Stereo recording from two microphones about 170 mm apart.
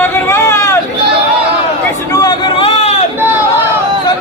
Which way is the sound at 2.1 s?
25° left (ahead or behind).